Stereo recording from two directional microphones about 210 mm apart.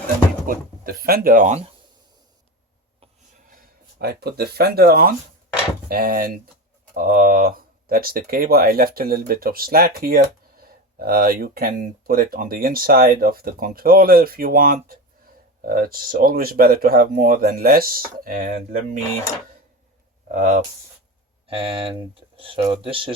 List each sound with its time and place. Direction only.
0.4 s speech: 45° right (ahead or behind)
3.5 s speech: 50° right (ahead or behind)
20.2 s speech: 40° right (ahead or behind)
21.4 s speech: 25° right (ahead or behind)